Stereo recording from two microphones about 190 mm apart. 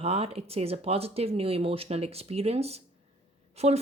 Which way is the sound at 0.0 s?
35° right (ahead or behind).